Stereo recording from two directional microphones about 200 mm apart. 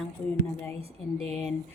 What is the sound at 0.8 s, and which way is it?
Speech, 30° right (ahead or behind).